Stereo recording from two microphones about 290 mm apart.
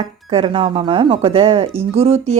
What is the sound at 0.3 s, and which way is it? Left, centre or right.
Speech, centre.